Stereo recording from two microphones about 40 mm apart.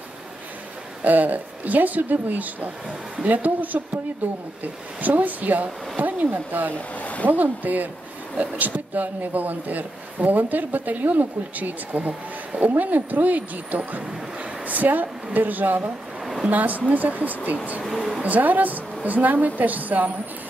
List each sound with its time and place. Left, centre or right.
1.0 s a man's voice: right
6.7 s speech: left
7.2 s a man's voice: right
12.7 s a man's voice: right
17.8 s speech: centre
18.2 s a man's voice: right